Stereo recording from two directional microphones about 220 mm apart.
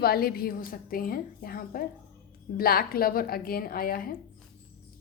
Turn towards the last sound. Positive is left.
turn(degrees=40)  # may be behind; listen again after turning